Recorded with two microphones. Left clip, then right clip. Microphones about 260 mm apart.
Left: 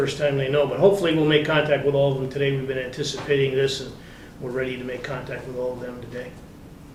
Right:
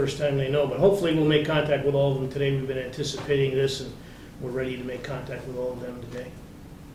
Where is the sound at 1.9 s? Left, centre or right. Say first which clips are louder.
Left 3 dB; left.